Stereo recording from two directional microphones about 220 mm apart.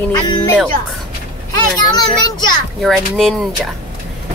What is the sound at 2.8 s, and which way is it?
Speech, centre (ahead or behind).